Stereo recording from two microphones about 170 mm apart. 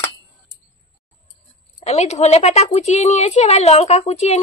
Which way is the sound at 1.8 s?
40° left (ahead or behind).